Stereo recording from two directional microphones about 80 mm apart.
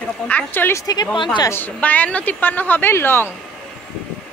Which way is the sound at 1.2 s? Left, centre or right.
Left.